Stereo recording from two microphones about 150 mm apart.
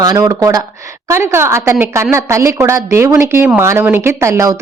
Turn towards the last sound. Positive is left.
turn(degrees=-20)  # may be behind; listen again after turning